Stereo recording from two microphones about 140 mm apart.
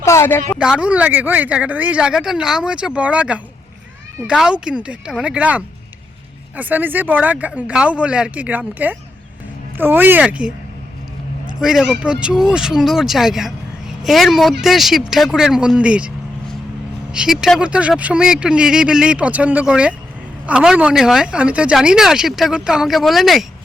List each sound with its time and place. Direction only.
0.0 s a sound: 20° left (ahead or behind)
0.6 s speech: 5° right (ahead or behind)
11.6 s speech: 5° right (ahead or behind)